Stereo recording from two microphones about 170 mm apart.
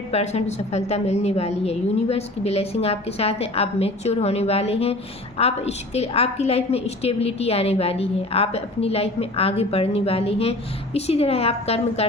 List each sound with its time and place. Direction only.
0.1 s a woman's voice: 40° left (ahead or behind)